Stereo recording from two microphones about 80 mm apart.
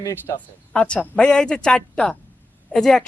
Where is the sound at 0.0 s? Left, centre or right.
Left.